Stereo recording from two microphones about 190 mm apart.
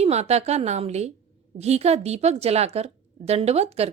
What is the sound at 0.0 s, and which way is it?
A woman's voice, 35° right (ahead or behind).